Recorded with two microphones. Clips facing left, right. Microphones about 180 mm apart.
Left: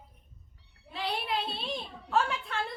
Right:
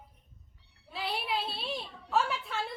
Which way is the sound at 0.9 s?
5° right (ahead or behind).